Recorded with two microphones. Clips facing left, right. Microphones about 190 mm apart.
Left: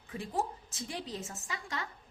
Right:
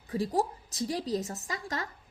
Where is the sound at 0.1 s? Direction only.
35° right (ahead or behind).